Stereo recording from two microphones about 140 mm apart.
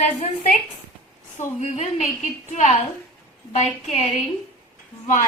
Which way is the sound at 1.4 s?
55° left (ahead or behind).